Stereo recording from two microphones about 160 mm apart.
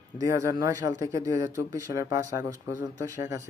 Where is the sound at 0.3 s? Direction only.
20° right (ahead or behind).